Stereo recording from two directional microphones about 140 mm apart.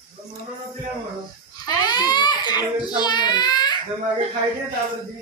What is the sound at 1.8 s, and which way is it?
A child's voice, 30° left (ahead or behind).